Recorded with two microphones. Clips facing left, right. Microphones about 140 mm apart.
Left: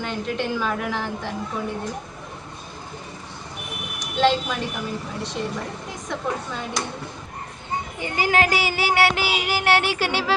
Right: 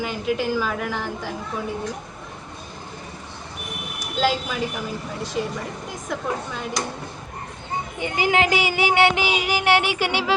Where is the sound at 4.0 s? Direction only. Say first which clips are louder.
Left 3 dB; 5° right (ahead or behind).